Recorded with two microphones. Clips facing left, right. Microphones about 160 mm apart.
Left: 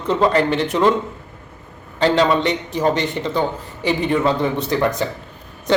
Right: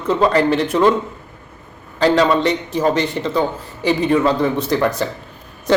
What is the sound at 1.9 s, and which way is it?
Speech, 20° left (ahead or behind).